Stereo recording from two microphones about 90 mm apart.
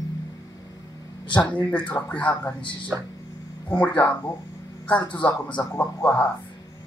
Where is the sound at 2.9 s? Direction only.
25° right (ahead or behind).